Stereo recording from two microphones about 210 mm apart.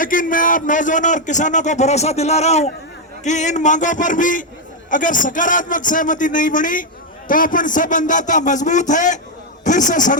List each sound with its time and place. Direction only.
0.0 s a man's voice: 40° left (ahead or behind)